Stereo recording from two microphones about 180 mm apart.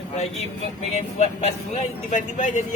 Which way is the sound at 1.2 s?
40° left (ahead or behind).